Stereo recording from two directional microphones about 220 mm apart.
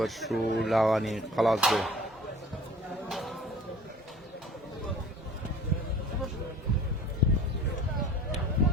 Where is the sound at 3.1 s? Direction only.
Centre (ahead or behind).